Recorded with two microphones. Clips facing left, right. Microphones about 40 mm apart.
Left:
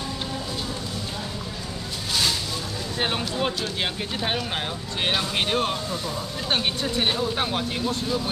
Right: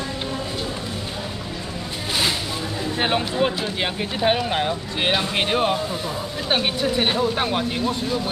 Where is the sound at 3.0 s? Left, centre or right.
Centre.